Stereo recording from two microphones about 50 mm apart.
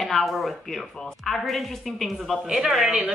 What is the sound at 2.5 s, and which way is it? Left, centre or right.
Speech, centre.